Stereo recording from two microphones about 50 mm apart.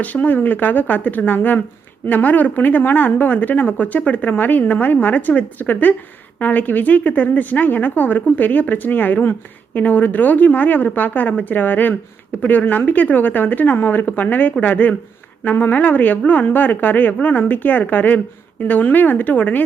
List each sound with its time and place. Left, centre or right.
0.0 s speech: left